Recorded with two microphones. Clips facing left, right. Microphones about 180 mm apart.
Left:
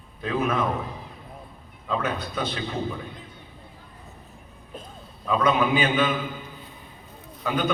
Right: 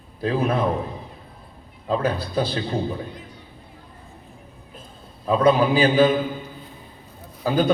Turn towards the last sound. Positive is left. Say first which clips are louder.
# right 5 dB
turn(degrees=-35)  # may be behind; listen again after turning